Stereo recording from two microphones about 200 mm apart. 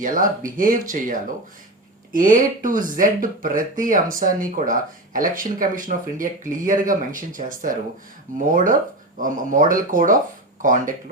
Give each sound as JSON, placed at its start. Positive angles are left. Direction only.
{"t": 0.0, "sound": "speech", "side_deg": -45}